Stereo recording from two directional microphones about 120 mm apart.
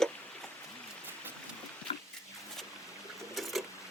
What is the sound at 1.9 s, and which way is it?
Pig, 50° left (ahead or behind).